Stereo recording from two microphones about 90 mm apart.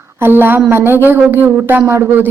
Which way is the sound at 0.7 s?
25° right (ahead or behind).